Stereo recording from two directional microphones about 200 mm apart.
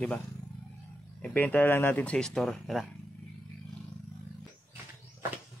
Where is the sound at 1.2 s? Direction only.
5° left (ahead or behind).